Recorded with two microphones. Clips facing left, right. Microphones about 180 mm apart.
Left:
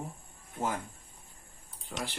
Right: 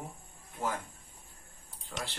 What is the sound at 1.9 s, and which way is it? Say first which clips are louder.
Speech: left 2 dB; 20° left (ahead or behind).